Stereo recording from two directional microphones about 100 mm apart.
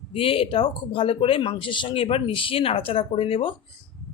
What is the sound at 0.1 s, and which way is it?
Speech, 70° left (ahead or behind).